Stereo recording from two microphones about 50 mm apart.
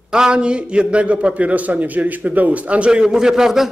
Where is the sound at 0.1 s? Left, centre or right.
Centre.